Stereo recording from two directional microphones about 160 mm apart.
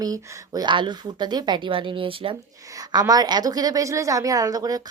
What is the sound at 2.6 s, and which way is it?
A woman's voice, 20° right (ahead or behind).